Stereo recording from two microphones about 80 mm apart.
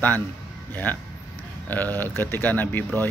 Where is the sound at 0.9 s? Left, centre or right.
Left.